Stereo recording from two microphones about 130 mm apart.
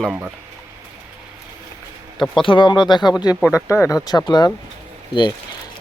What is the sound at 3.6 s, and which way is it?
Speech, 20° left (ahead or behind).